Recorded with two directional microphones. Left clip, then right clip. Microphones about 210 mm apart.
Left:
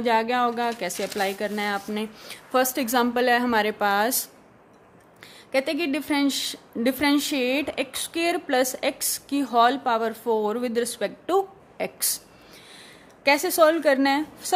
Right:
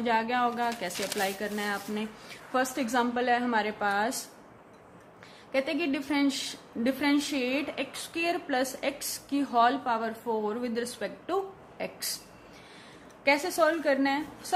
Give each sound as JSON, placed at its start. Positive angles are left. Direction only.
{"t": 0.0, "sound": "a woman's voice", "side_deg": 45}
{"t": 5.5, "sound": "a woman's voice", "side_deg": 50}
{"t": 13.2, "sound": "a woman's voice", "side_deg": 50}